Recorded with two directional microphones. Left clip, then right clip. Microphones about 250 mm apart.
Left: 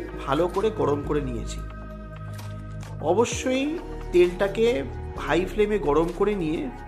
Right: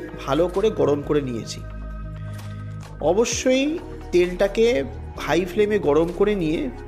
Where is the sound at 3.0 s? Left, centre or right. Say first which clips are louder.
Right 3 dB; centre.